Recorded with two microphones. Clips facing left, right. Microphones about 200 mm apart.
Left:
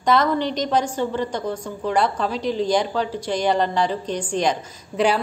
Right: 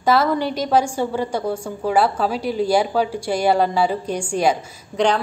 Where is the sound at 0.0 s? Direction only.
5° right (ahead or behind).